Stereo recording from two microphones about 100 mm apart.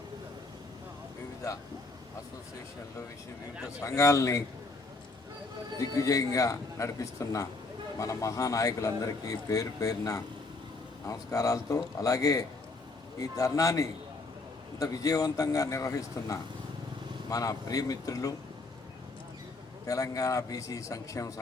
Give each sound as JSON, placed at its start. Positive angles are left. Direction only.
{"t": 3.8, "sound": "a man's voice", "side_deg": 35}
{"t": 5.8, "sound": "a man's voice", "side_deg": 35}
{"t": 19.9, "sound": "a man's voice", "side_deg": 35}